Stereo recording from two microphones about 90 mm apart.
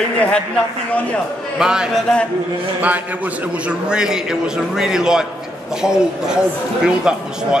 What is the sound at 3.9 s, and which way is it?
A man's voice, 10° right (ahead or behind).